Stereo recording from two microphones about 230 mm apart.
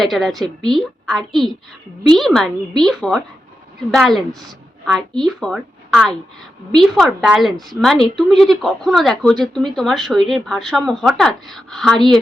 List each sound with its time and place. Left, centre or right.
0.0 s a woman's voice: centre